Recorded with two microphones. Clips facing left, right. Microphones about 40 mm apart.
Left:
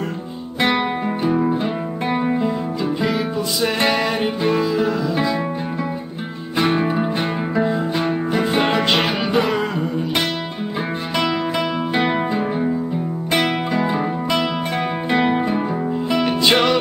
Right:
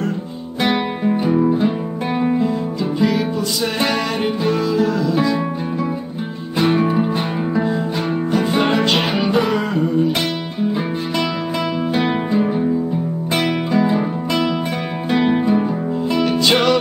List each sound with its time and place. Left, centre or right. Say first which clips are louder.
0.7 s music: right 2 dB; centre
6.6 s music: right 2 dB; centre
8.3 s music: right 3 dB; centre
8.9 s music: right 1 dB; centre
11.9 s music: right 1 dB; centre